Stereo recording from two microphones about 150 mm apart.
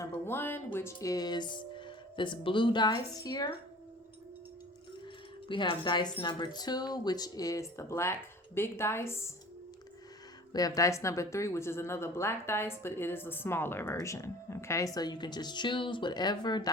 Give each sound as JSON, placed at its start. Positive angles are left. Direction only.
{"t": 0.0, "sound": "a woman's voice", "side_deg": 15}
{"t": 5.5, "sound": "a woman's voice", "side_deg": 35}
{"t": 10.5, "sound": "a woman's voice", "side_deg": 25}